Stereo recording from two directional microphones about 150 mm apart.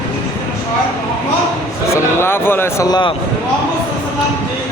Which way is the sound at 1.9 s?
15° left (ahead or behind).